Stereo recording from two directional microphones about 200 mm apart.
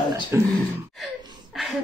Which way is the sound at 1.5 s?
Centre (ahead or behind).